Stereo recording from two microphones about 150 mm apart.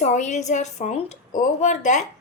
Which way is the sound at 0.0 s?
50° left (ahead or behind).